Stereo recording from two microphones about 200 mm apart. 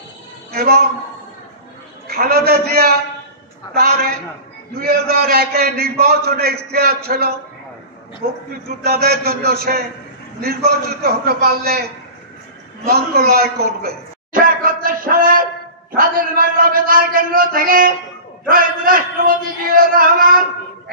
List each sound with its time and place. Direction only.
0.5 s a woman's voice: 50° right (ahead or behind)
2.0 s a man's voice: 50° right (ahead or behind)
12.8 s a sound: 50° right (ahead or behind)
16.0 s a man's voice: 45° right (ahead or behind)